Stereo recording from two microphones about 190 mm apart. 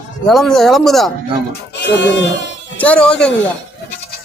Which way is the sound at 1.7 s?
65° left (ahead or behind).